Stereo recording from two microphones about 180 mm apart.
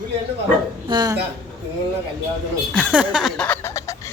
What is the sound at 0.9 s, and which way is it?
Speech, 25° right (ahead or behind).